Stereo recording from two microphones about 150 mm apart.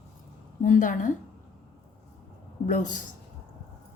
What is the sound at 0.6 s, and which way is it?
Speech, 60° left (ahead or behind).